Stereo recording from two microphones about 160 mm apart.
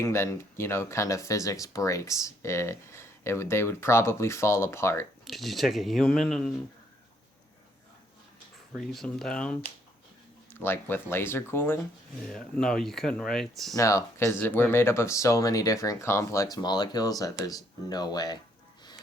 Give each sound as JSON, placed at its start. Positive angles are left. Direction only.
{"t": 0.0, "sound": "speech", "side_deg": 15}
{"t": 5.2, "sound": "speech", "side_deg": 0}
{"t": 8.7, "sound": "speech", "side_deg": 0}
{"t": 12.3, "sound": "speech", "side_deg": 5}
{"t": 13.7, "sound": "speech", "side_deg": 20}